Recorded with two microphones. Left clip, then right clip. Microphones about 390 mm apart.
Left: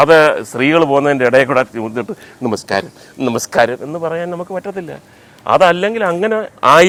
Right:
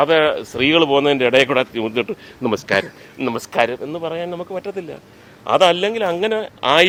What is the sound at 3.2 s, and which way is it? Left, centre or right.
A man's voice, left.